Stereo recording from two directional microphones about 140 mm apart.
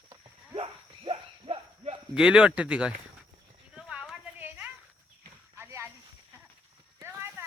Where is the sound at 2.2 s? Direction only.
5° right (ahead or behind).